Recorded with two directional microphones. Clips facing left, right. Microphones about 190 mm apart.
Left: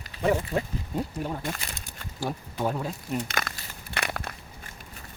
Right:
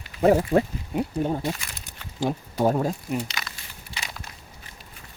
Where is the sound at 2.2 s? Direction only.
20° right (ahead or behind).